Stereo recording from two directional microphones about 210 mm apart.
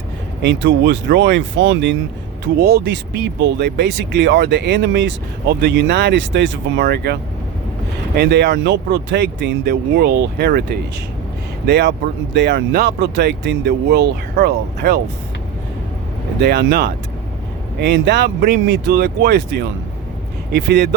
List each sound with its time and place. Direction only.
0.4 s speech: 55° right (ahead or behind)
16.4 s speech: 50° right (ahead or behind)